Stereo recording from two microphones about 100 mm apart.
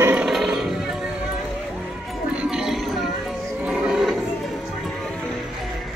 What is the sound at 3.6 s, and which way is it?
Music, 5° right (ahead or behind).